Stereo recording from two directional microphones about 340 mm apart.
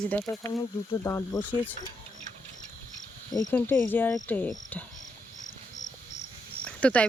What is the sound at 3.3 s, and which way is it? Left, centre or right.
Speech, centre.